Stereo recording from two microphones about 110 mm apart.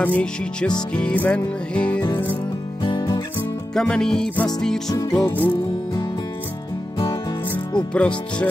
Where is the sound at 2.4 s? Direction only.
40° left (ahead or behind).